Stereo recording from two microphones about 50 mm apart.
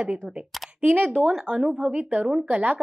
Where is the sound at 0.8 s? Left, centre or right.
Right.